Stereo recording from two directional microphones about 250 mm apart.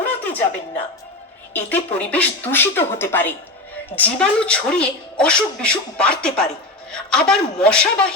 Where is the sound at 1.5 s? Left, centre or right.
Centre.